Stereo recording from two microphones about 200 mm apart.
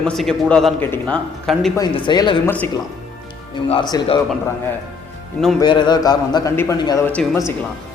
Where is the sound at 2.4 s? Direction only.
10° left (ahead or behind).